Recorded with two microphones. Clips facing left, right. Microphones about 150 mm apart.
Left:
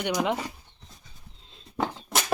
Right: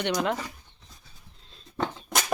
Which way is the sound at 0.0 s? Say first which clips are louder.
Even; 10° left (ahead or behind).